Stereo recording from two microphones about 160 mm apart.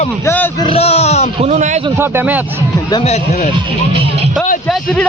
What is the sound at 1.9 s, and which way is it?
Speech, 15° right (ahead or behind).